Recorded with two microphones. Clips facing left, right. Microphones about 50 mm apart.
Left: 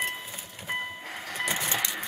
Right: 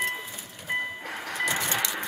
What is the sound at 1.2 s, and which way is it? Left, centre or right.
Printer, right.